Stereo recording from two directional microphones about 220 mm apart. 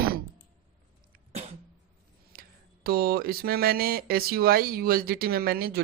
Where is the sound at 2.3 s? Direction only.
45° right (ahead or behind).